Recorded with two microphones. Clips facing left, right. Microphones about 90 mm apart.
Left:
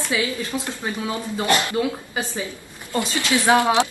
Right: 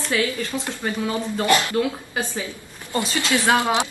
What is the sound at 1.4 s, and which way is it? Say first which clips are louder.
Speech: right 1 dB; 20° left (ahead or behind).